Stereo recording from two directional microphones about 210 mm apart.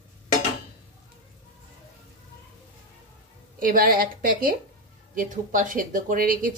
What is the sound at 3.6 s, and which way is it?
A woman's voice, 40° right (ahead or behind).